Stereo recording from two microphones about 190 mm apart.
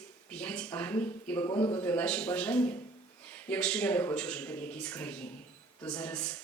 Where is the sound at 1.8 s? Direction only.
10° left (ahead or behind).